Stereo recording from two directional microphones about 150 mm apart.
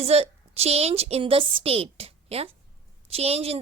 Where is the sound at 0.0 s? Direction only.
45° right (ahead or behind).